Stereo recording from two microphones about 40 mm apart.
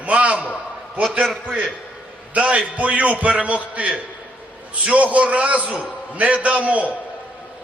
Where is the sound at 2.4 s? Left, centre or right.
Right.